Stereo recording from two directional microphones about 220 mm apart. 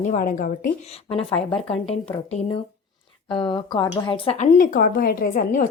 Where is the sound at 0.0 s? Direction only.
35° left (ahead or behind).